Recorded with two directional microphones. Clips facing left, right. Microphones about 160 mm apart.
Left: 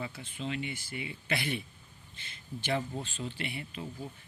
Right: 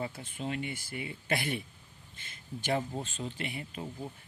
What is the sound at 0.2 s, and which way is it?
A man's voice, 50° right (ahead or behind).